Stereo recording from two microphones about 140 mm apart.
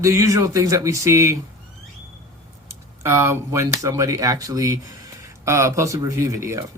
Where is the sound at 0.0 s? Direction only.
25° right (ahead or behind).